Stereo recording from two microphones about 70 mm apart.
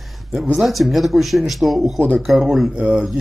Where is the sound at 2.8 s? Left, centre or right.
Centre.